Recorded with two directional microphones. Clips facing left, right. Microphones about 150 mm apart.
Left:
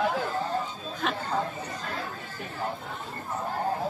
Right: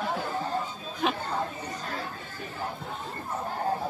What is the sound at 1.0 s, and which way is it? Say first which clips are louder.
Speech: right 3 dB; 5° right (ahead or behind).